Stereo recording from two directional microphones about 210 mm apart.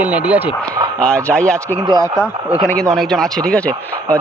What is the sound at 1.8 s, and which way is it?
Speech, 20° right (ahead or behind).